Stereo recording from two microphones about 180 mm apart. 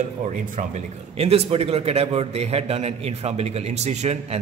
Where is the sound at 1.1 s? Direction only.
35° right (ahead or behind).